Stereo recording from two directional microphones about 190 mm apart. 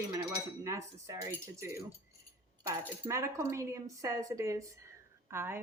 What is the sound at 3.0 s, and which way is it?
A woman's voice, 15° right (ahead or behind).